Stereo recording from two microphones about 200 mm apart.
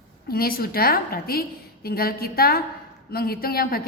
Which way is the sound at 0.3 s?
50° left (ahead or behind).